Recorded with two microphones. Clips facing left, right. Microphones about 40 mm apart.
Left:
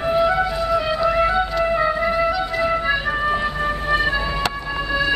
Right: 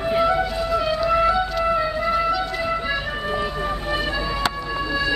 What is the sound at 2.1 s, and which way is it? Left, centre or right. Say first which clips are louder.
Music: left 1 dB; centre.